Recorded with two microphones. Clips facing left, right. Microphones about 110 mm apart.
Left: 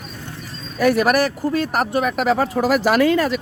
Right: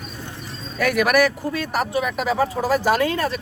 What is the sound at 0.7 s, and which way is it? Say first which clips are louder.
Speech: left 2 dB; 30° left (ahead or behind).